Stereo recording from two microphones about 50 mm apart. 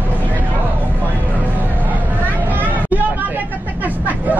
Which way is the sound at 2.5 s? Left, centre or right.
Right.